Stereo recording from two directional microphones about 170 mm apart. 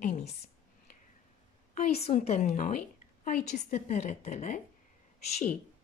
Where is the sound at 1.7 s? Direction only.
40° left (ahead or behind).